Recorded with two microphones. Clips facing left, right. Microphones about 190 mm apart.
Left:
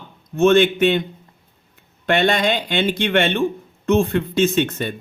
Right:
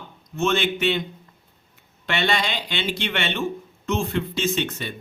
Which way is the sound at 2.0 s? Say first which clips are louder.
Left 7 dB; 50° left (ahead or behind).